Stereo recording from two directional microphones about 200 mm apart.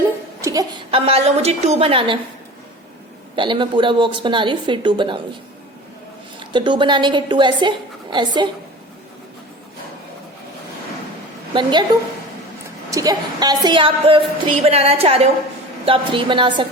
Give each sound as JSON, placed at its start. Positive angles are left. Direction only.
{"t": 0.9, "sound": "a woman's voice", "side_deg": -30}
{"t": 3.3, "sound": "a woman's voice", "side_deg": -25}
{"t": 6.4, "sound": "a woman's voice", "side_deg": -25}
{"t": 11.5, "sound": "a woman's voice", "side_deg": -20}
{"t": 12.9, "sound": "a woman's voice", "side_deg": -15}